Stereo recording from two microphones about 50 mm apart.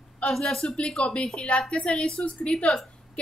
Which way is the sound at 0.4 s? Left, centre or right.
Centre.